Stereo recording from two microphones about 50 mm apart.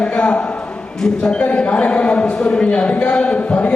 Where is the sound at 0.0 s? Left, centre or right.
Left.